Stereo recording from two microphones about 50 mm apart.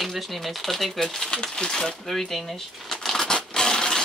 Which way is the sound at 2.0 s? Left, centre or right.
Centre.